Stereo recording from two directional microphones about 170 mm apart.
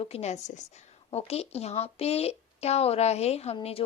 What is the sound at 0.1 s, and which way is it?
A woman's voice, 40° left (ahead or behind).